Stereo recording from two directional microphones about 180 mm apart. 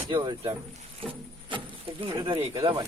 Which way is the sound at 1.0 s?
30° right (ahead or behind).